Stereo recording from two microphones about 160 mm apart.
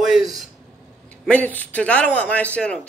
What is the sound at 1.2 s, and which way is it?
A man's voice, 10° left (ahead or behind).